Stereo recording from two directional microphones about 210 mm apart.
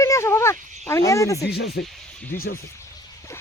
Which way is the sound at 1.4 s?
50° left (ahead or behind).